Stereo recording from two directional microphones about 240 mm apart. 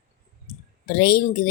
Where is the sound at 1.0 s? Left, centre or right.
Left.